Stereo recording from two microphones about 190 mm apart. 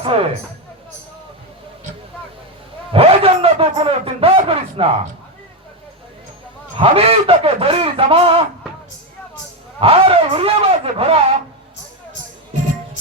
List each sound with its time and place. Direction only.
0.0 s speech: 30° right (ahead or behind)
2.9 s a man's voice: 30° right (ahead or behind)
6.7 s a man's voice: 30° right (ahead or behind)
9.8 s a man's voice: 30° right (ahead or behind)